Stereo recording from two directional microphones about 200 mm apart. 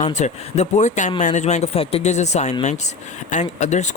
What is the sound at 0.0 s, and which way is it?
Speech, 35° left (ahead or behind).